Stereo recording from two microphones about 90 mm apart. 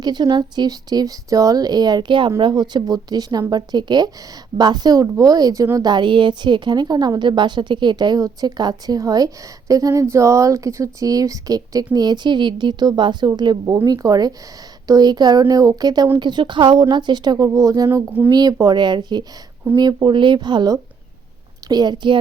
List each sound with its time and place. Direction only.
0.0 s a woman's voice: 50° right (ahead or behind)
19.7 s a woman's voice: 45° right (ahead or behind)
20.1 s a woman's voice: 60° right (ahead or behind)